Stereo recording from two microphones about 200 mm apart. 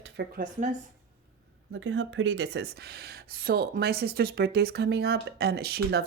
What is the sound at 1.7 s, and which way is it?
Speech, 70° right (ahead or behind).